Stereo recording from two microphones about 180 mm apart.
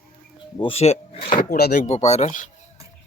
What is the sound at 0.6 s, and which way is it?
Speech, 35° left (ahead or behind).